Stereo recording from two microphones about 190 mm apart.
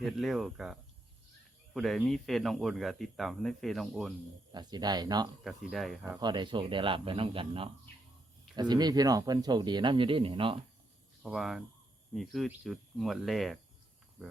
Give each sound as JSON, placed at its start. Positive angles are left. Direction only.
{"t": 0.0, "sound": "speech", "side_deg": 0}
{"t": 4.5, "sound": "speech", "side_deg": -20}
{"t": 5.4, "sound": "speech", "side_deg": 0}
{"t": 6.1, "sound": "speech", "side_deg": -20}
{"t": 11.2, "sound": "speech", "side_deg": 0}